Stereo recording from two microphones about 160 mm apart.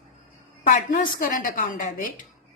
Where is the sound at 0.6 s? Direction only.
60° left (ahead or behind).